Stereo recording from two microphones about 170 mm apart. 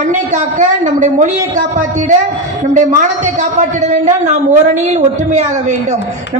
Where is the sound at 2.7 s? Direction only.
45° right (ahead or behind).